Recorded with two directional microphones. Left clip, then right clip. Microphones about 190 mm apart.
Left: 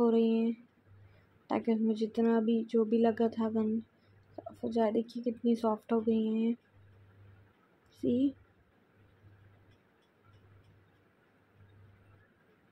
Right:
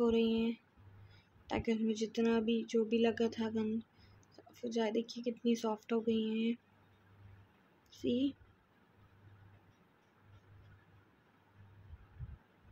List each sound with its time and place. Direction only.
0.0 s speech: 25° left (ahead or behind)
7.9 s speech: 25° left (ahead or behind)